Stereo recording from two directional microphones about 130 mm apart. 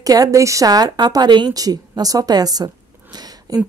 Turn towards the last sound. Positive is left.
turn(degrees=-30)  # may be behind; listen again after turning